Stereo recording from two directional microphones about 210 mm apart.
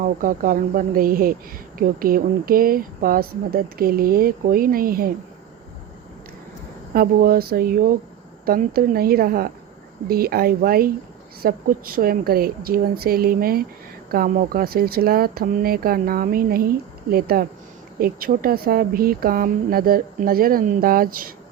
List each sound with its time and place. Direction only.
0.0 s speech: 40° right (ahead or behind)
6.9 s speech: 45° right (ahead or behind)